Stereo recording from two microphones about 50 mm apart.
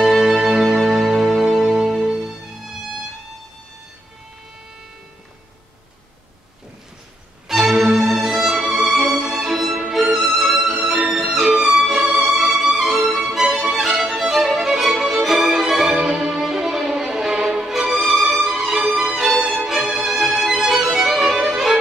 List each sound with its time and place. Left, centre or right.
0.0 s music: centre
7.4 s music: centre
12.1 s music: right
12.4 s music: centre
19.8 s music: centre
21.4 s violin: centre